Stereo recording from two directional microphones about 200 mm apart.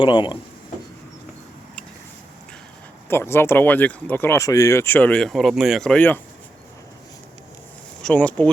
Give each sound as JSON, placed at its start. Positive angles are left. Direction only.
{"t": 0.0, "sound": "speech", "side_deg": 25}
{"t": 3.1, "sound": "speech", "side_deg": 10}
{"t": 8.0, "sound": "speech", "side_deg": 5}